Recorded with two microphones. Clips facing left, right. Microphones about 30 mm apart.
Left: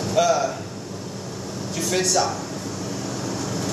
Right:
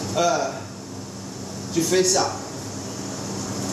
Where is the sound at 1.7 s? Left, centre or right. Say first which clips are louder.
Right 3 dB; centre.